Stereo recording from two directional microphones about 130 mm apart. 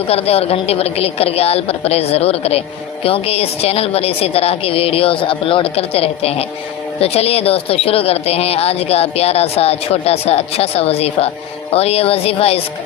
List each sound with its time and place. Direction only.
0.1 s a woman's voice: 50° left (ahead or behind)